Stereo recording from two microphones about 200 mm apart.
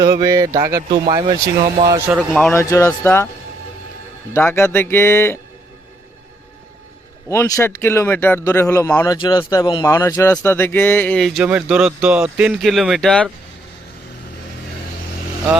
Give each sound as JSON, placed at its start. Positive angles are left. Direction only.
{"t": 0.0, "sound": "speech", "side_deg": -15}
{"t": 2.0, "sound": "speech", "side_deg": -5}
{"t": 2.5, "sound": "a man's voice", "side_deg": 15}
{"t": 4.4, "sound": "a man's voice", "side_deg": 10}
{"t": 7.3, "sound": "a man's voice", "side_deg": 15}